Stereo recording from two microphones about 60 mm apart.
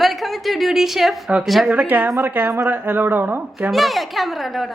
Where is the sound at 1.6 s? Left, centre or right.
Right.